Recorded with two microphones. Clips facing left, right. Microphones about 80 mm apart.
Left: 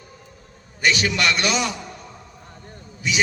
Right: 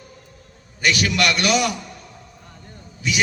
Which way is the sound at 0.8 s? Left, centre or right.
Left.